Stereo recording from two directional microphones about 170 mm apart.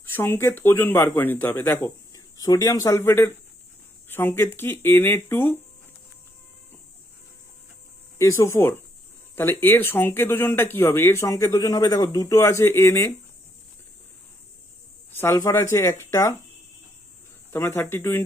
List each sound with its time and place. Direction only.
0.0 s speech: 10° left (ahead or behind)
8.2 s speech: 15° left (ahead or behind)
15.2 s speech: 20° left (ahead or behind)
17.5 s speech: 15° left (ahead or behind)